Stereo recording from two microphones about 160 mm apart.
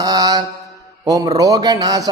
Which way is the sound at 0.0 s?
25° right (ahead or behind).